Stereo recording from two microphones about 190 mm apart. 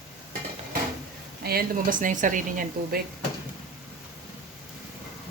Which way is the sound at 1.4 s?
50° right (ahead or behind).